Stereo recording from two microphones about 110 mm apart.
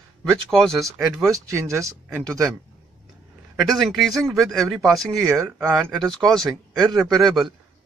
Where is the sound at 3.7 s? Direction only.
Centre (ahead or behind).